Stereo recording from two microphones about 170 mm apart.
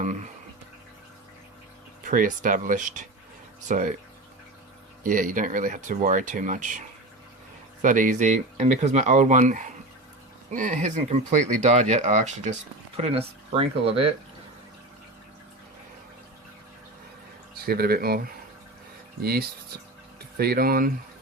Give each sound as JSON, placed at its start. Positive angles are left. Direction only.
{"t": 2.0, "sound": "speech", "side_deg": -50}
{"t": 5.0, "sound": "speech", "side_deg": -50}
{"t": 17.7, "sound": "speech", "side_deg": -65}